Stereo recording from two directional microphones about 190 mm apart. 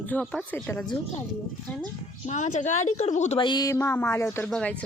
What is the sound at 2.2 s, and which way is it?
Speech, 40° left (ahead or behind).